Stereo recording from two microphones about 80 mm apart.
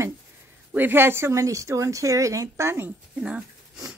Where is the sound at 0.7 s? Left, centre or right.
Right.